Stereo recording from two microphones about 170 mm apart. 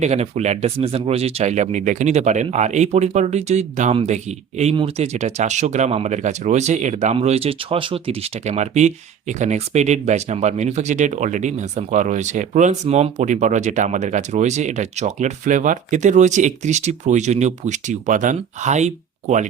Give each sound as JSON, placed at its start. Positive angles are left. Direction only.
{"t": 0.0, "sound": "speech", "side_deg": -40}